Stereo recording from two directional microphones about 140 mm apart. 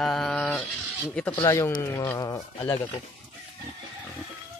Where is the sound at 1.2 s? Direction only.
10° left (ahead or behind).